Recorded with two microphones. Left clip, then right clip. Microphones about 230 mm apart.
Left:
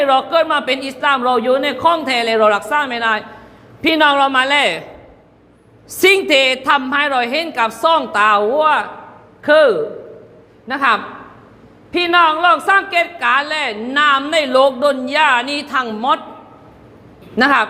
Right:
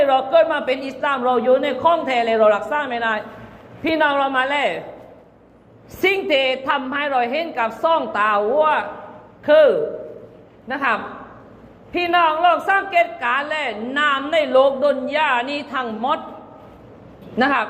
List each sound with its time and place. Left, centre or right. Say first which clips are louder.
0.0 s a woman's voice: left 1 dB; left
6.0 s a woman's voice: left 6 dB; left
17.3 s a woman's voice: left 5 dB; left